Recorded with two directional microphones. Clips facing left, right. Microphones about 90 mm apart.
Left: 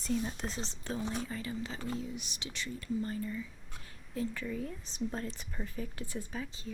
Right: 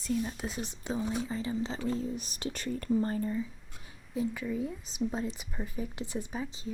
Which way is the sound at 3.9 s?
10° right (ahead or behind).